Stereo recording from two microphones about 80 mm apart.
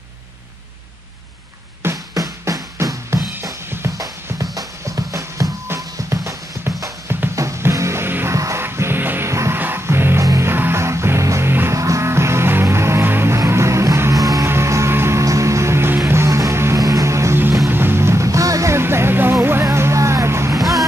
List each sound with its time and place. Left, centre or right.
1.8 s music: right
2.1 s music: right
7.3 s music: right
9.3 s music: right
14.1 s music: right
17.6 s music: right